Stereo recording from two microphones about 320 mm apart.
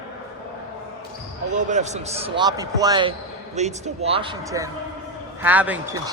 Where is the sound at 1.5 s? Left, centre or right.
Right.